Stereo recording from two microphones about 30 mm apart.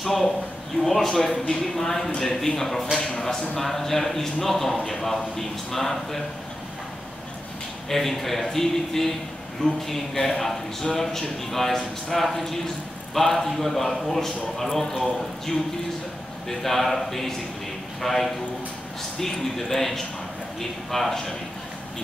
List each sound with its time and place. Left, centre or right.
0.0 s a man's voice: centre
7.9 s a man's voice: centre
16.4 s a man's voice: centre